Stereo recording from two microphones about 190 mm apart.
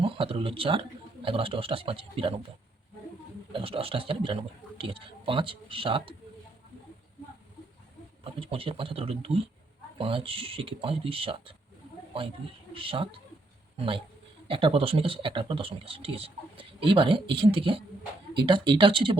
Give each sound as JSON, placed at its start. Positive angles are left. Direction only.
{"t": 0.0, "sound": "speech", "side_deg": -30}
{"t": 3.5, "sound": "speech", "side_deg": -30}
{"t": 8.2, "sound": "speech", "side_deg": -30}
{"t": 12.7, "sound": "speech", "side_deg": -30}